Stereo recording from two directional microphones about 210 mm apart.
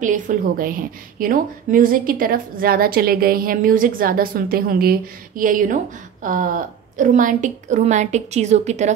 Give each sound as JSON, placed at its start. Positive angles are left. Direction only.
{"t": 0.0, "sound": "a woman's voice", "side_deg": -40}